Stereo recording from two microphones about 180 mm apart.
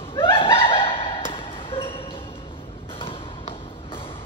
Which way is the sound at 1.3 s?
30° left (ahead or behind).